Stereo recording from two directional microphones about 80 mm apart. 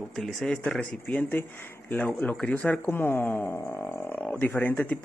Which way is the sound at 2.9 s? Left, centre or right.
Left.